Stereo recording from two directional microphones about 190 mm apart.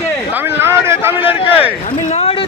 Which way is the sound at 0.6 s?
15° right (ahead or behind).